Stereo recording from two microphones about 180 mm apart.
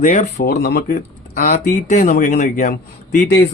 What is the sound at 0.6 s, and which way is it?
Speech, 60° left (ahead or behind).